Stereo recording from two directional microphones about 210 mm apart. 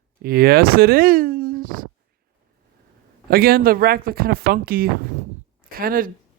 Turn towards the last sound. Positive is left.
turn(degrees=-45)  # may be behind; listen again after turning